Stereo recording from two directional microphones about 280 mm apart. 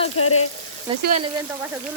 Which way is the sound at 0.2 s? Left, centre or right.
Left.